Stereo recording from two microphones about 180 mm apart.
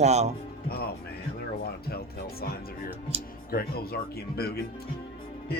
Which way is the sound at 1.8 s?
60° left (ahead or behind).